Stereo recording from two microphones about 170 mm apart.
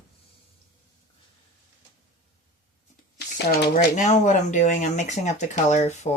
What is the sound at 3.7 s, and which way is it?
Speech, 45° left (ahead or behind).